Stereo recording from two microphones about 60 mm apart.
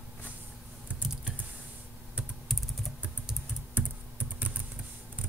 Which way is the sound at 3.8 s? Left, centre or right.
Right.